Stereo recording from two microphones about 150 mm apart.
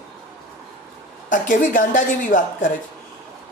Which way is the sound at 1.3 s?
65° left (ahead or behind).